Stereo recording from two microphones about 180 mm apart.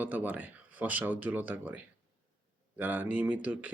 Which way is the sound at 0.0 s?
10° right (ahead or behind).